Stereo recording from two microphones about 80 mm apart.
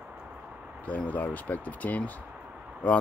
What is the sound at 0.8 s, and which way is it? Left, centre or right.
Speech, centre.